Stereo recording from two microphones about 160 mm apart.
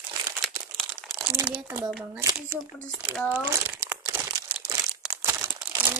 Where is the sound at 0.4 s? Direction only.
Centre (ahead or behind).